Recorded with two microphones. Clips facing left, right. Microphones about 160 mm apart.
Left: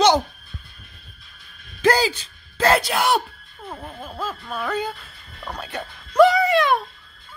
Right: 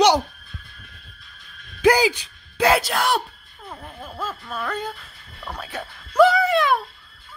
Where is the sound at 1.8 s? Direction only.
15° right (ahead or behind).